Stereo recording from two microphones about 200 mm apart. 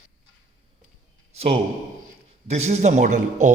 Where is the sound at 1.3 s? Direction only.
30° right (ahead or behind).